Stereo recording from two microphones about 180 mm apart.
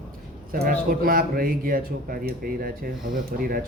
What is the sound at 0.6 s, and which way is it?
Speech, 55° right (ahead or behind).